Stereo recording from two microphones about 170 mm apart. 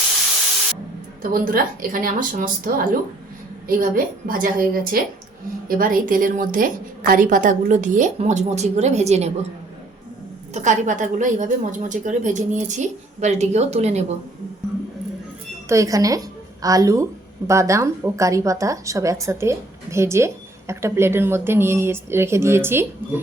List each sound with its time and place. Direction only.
1.2 s a woman's voice: 55° right (ahead or behind); by 9.3 s 40° right (ahead or behind)
10.5 s a woman's voice: 45° right (ahead or behind)
15.7 s a woman's voice: 20° right (ahead or behind)